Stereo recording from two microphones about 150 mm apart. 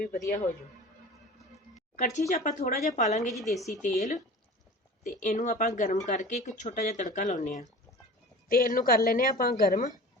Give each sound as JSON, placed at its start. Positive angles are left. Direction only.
{"t": 0.0, "sound": "speech", "side_deg": 75}
{"t": 2.0, "sound": "speech", "side_deg": 55}
{"t": 3.3, "sound": "a woman's voice", "side_deg": 0}
{"t": 3.8, "sound": "speech", "side_deg": 60}
{"t": 8.4, "sound": "speech", "side_deg": 70}